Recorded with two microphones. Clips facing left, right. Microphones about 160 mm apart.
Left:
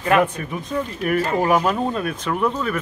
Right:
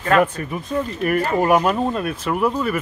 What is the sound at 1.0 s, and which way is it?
Speech, centre (ahead or behind).